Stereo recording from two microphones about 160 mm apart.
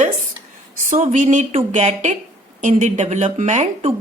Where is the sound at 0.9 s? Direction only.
50° right (ahead or behind).